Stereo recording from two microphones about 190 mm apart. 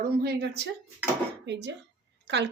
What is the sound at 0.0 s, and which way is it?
Speech, 55° right (ahead or behind).